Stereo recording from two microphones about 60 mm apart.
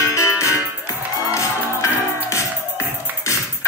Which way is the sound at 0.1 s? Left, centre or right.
Left.